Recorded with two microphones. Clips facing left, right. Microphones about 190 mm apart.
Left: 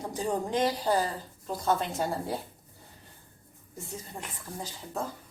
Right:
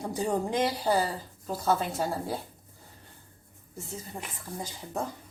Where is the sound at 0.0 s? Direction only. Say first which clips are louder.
Right 2 dB; 10° right (ahead or behind).